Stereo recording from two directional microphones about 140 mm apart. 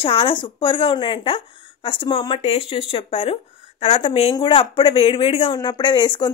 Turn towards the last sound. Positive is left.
turn(degrees=30)  # may be behind; listen again after turning